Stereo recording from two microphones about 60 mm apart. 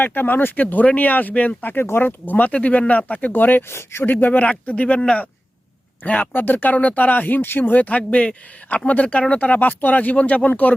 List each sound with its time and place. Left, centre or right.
0.0 s speech: left
1.7 s speech: left
3.7 s speech: left
4.0 s speech: left
6.3 s speech: left